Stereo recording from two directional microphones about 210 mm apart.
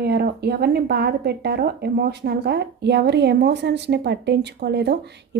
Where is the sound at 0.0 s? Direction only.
50° right (ahead or behind).